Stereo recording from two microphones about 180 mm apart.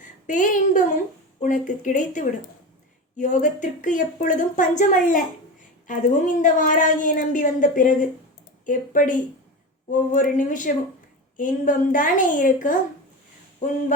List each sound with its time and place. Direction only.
0.3 s a woman's voice: 45° left (ahead or behind)